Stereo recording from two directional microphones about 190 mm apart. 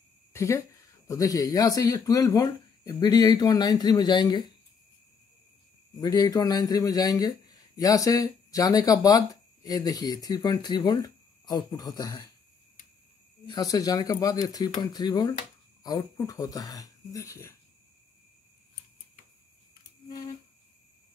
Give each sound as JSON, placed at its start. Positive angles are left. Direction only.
{"t": 0.3, "sound": "a man's voice", "side_deg": 15}
{"t": 5.9, "sound": "a man's voice", "side_deg": 20}
{"t": 13.5, "sound": "a man's voice", "side_deg": 20}